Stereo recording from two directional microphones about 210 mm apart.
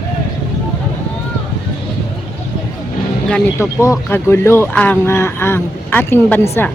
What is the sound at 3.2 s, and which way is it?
Speech, 10° left (ahead or behind).